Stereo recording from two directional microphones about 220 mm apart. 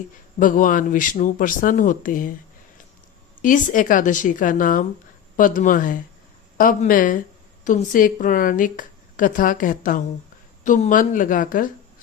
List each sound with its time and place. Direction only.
0.3 s speech: 35° left (ahead or behind)
3.4 s speech: 35° left (ahead or behind)